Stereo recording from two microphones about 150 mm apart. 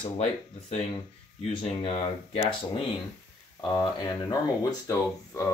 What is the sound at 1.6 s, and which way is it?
Speech, 45° left (ahead or behind).